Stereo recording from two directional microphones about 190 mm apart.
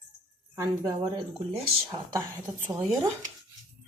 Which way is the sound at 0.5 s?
15° right (ahead or behind).